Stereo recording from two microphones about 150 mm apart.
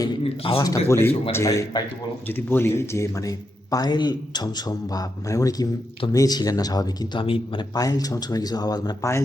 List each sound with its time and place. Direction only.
0.4 s a man's voice: 35° left (ahead or behind)
0.9 s a man's voice: 15° left (ahead or behind)